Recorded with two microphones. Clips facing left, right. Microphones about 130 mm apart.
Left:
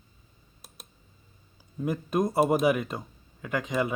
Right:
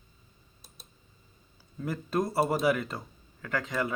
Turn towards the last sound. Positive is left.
turn(degrees=15)  # may be behind; listen again after turning